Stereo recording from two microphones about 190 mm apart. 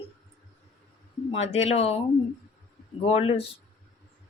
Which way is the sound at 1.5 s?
35° left (ahead or behind).